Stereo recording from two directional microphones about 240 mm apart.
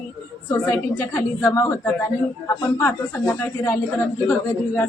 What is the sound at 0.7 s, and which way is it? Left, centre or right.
A woman's voice, centre.